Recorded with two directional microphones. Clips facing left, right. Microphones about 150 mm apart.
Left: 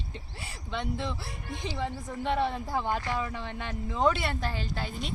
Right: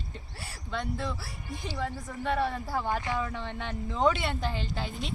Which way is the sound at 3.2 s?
5° left (ahead or behind).